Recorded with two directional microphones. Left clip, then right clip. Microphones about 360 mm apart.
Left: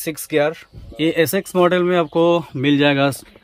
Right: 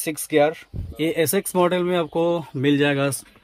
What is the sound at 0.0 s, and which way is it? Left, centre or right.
Speech, centre.